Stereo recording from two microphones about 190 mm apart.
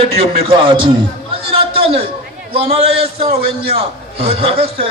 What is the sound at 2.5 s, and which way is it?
Speech, 30° right (ahead or behind).